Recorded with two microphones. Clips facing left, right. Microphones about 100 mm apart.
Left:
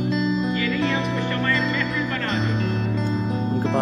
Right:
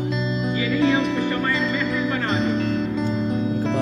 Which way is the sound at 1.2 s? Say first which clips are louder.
Right 1 dB; 15° right (ahead or behind).